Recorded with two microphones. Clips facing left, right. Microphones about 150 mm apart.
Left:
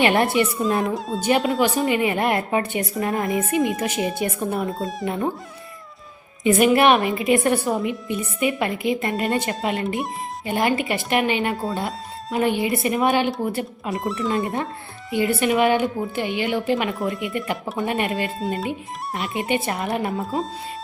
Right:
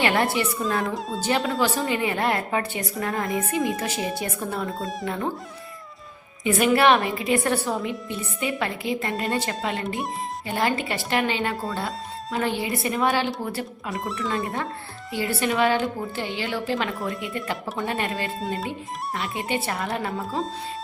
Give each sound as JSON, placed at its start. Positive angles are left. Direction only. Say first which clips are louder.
{"t": 0.0, "sound": "speech", "louder": "left 4 dB", "side_deg": 20}
{"t": 0.9, "sound": "speech", "louder": "left 3 dB", "side_deg": 0}
{"t": 1.2, "sound": "a woman's voice", "louder": "left 4 dB", "side_deg": 15}
{"t": 4.7, "sound": "speech", "louder": "left 3 dB", "side_deg": 0}
{"t": 5.0, "sound": "speech", "louder": "left 4 dB", "side_deg": 20}
{"t": 6.4, "sound": "a woman's voice", "louder": "left 3 dB", "side_deg": 20}
{"t": 13.9, "sound": "speech", "louder": "left 5 dB", "side_deg": 0}
{"t": 15.1, "sound": "a woman's voice", "louder": "left 5 dB", "side_deg": 20}
{"t": 18.3, "sound": "speech", "louder": "left 3 dB", "side_deg": 0}
{"t": 18.7, "sound": "speech", "louder": "left 2 dB", "side_deg": 20}
{"t": 20.2, "sound": "speech", "louder": "left 2 dB", "side_deg": 0}